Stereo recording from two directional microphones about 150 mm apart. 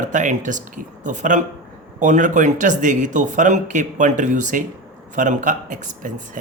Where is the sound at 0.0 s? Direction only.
55° right (ahead or behind).